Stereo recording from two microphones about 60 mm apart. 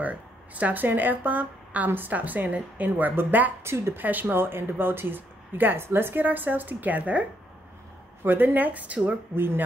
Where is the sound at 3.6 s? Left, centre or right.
Right.